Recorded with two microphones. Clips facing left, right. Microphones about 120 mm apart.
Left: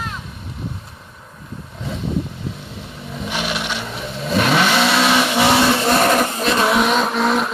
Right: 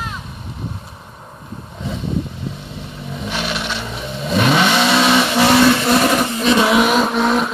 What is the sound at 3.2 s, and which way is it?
Vehicle, 10° left (ahead or behind).